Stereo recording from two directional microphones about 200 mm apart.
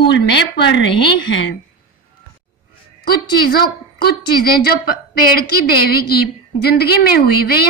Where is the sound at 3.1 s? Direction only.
50° left (ahead or behind).